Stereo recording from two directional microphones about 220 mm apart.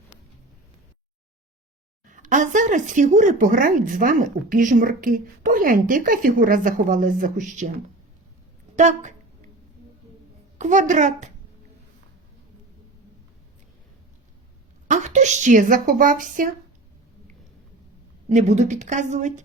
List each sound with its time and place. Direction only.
2.0 s speech: 35° right (ahead or behind)
8.7 s speech: 35° right (ahead or behind)
10.6 s speech: 35° right (ahead or behind)
14.8 s speech: 35° right (ahead or behind)
18.3 s speech: 30° right (ahead or behind)